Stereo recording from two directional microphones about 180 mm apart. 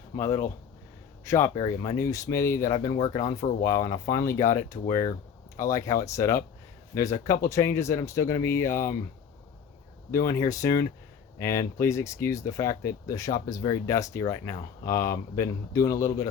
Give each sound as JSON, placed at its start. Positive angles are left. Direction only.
{"t": 0.2, "sound": "speech", "side_deg": 15}
{"t": 10.1, "sound": "speech", "side_deg": 20}